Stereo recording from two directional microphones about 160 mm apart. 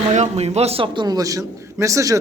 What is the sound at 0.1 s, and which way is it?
A man's voice, 45° right (ahead or behind).